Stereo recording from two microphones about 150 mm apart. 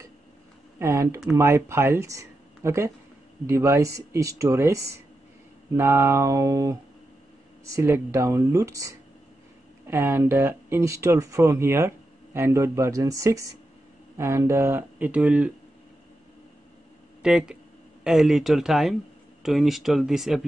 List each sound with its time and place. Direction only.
0.7 s speech: 20° right (ahead or behind)
17.2 s speech: 5° right (ahead or behind)